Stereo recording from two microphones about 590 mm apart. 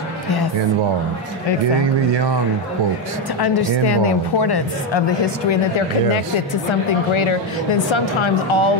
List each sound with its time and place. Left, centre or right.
3.8 s a woman's voice: left